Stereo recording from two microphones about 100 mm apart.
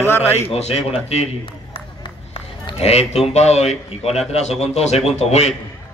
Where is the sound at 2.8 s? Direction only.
90° left.